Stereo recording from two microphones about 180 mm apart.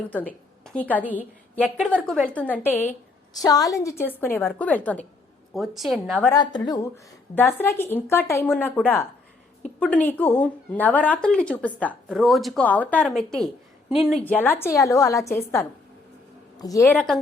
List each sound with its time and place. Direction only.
0.1 s a woman's voice: 10° left (ahead or behind)
2.0 s a woman's voice: 10° right (ahead or behind)
2.3 s a woman's voice: 10° left (ahead or behind)
3.3 s a woman's voice: 20° left (ahead or behind); by 6.2 s centre (ahead or behind)
6.3 s a woman's voice: 20° left (ahead or behind)
16.6 s a woman's voice: 20° left (ahead or behind)